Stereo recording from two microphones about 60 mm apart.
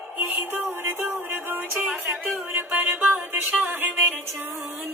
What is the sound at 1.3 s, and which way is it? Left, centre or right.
Music, right.